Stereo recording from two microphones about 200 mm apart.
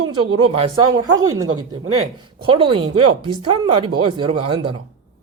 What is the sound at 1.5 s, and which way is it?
Speech, 90° right.